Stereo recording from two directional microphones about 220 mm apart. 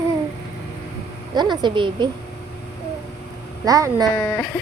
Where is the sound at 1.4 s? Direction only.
20° right (ahead or behind).